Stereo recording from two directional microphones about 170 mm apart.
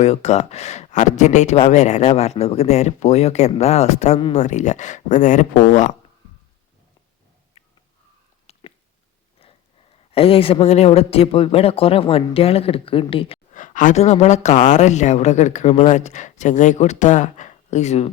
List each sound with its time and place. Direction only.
0.0 s speech: 40° left (ahead or behind)
7.6 s a sound: 35° left (ahead or behind)
10.1 s speech: 35° left (ahead or behind)
13.5 s speech: 50° left (ahead or behind)